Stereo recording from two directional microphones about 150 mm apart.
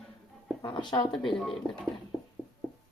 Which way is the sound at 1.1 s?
Centre (ahead or behind).